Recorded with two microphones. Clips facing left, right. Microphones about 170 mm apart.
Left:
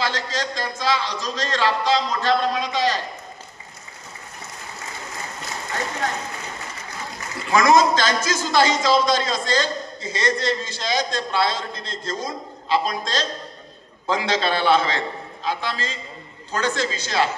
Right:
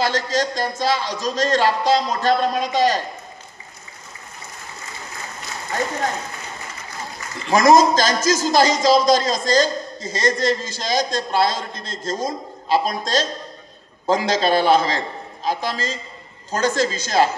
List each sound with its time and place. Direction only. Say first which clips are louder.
0.0 s a man's voice: right 5 dB; 45° right (ahead or behind)
7.5 s a man's voice: right 3 dB; 40° right (ahead or behind)